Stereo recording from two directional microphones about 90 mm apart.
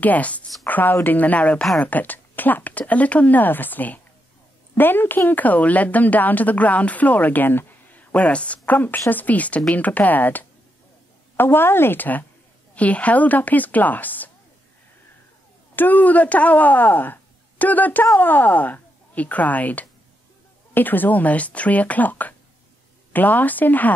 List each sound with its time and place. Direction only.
0.0 s a woman's voice: 15° left (ahead or behind)
15.7 s a woman's voice: 20° left (ahead or behind)